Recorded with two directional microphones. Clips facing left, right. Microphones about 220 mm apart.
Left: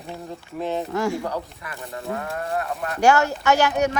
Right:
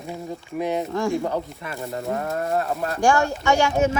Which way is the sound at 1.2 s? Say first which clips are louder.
Right 3 dB; 20° right (ahead or behind).